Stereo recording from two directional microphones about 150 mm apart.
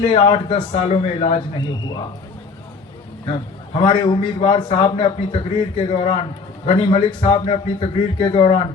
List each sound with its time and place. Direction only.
0.0 s a man's voice: 35° left (ahead or behind)
1.5 s a man's voice: 30° left (ahead or behind)
3.8 s a man's voice: 35° left (ahead or behind)